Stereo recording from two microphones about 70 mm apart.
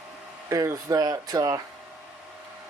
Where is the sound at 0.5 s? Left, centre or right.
Right.